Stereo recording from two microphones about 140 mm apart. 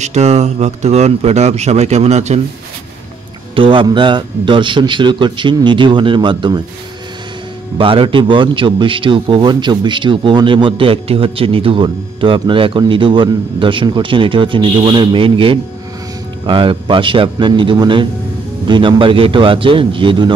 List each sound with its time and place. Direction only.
0.0 s speech: 50° right (ahead or behind)
3.5 s a man's voice: 40° right (ahead or behind)
7.7 s a man's voice: 40° right (ahead or behind)